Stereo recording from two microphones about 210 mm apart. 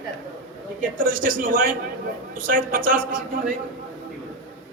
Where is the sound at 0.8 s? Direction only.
40° right (ahead or behind).